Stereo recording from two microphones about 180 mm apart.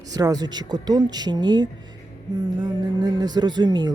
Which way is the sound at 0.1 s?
20° right (ahead or behind).